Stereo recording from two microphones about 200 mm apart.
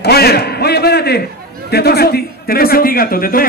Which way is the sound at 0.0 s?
50° left (ahead or behind).